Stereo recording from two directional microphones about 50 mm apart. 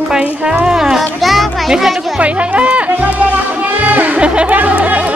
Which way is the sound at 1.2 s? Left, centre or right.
Centre.